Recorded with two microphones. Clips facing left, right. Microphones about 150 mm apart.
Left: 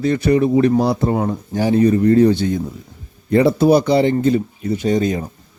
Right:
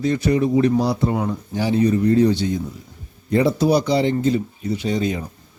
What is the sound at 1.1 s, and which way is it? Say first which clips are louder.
Speech: left 3 dB; 45° left (ahead or behind).